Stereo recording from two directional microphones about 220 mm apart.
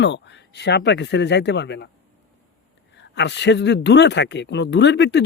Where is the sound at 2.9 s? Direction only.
50° left (ahead or behind).